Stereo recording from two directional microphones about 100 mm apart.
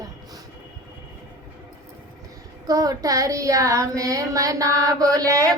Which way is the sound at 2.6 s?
35° right (ahead or behind).